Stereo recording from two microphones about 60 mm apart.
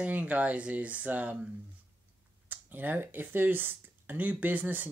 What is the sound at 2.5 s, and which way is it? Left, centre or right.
Speech, right.